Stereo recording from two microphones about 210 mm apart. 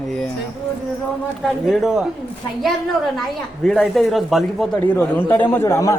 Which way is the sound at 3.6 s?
Centre (ahead or behind).